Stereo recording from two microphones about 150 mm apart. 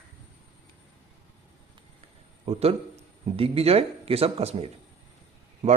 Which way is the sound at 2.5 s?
45° right (ahead or behind).